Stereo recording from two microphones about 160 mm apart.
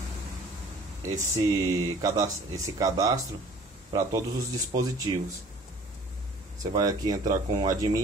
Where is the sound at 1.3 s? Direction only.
20° right (ahead or behind).